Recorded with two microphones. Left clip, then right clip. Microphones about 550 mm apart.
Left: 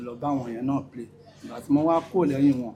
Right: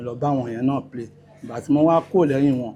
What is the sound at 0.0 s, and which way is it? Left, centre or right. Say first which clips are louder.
Speech: right 5 dB; right.